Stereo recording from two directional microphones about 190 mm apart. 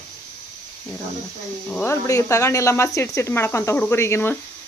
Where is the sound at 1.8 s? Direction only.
15° left (ahead or behind).